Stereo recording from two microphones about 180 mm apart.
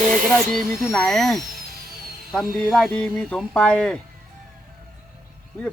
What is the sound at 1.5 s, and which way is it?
Music, 55° right (ahead or behind).